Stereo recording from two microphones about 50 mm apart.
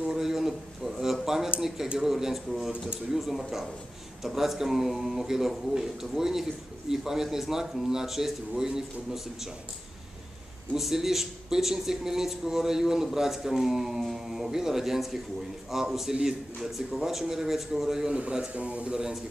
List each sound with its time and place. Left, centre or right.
0.0 s a sound: centre
2.0 s a man's voice: centre
10.7 s a man's voice: centre
18.1 s speech: centre